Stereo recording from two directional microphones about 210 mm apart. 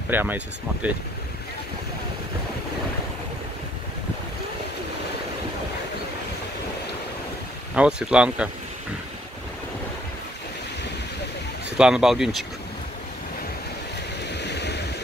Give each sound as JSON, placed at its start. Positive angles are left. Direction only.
{"t": 0.1, "sound": "speech", "side_deg": -10}
{"t": 7.7, "sound": "speech", "side_deg": -5}
{"t": 11.7, "sound": "speech", "side_deg": -5}
{"t": 14.3, "sound": "vehicle", "side_deg": 55}